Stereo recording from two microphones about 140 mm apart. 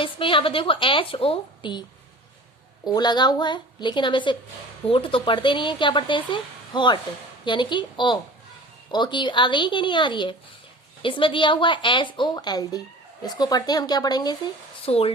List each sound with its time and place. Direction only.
0.0 s speech: 40° left (ahead or behind)
2.8 s speech: 30° left (ahead or behind)
14.8 s speech: 45° left (ahead or behind)